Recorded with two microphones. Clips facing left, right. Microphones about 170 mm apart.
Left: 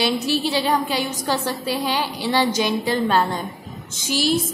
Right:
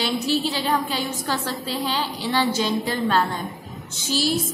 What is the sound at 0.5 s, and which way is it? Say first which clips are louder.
A woman's voice: left 3 dB; 15° left (ahead or behind).